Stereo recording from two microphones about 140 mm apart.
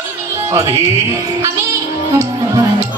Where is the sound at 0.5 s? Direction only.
20° right (ahead or behind).